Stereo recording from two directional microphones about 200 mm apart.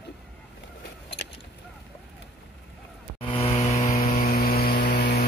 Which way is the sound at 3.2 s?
25° left (ahead or behind).